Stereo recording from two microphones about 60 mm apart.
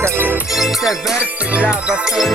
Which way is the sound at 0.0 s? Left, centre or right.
Right.